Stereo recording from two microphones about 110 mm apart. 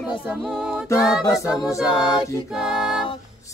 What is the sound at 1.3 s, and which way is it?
Music, 25° left (ahead or behind).